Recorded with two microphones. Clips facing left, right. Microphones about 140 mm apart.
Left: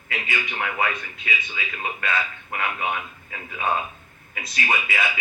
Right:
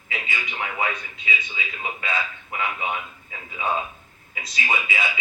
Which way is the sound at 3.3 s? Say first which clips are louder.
Left 1 dB; 60° left (ahead or behind).